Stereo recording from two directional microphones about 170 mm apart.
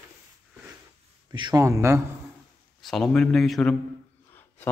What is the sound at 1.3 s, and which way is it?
Speech, 25° right (ahead or behind).